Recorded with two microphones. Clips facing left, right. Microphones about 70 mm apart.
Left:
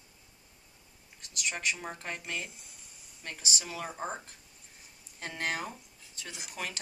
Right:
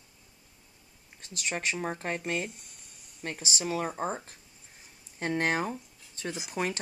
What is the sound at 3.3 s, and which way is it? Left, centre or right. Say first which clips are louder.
Speech: right 6 dB; right.